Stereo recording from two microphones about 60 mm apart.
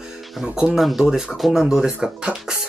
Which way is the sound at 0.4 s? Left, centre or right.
Centre.